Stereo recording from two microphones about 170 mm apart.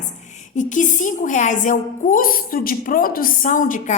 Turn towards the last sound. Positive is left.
turn(degrees=50)  # may be behind; listen again after turning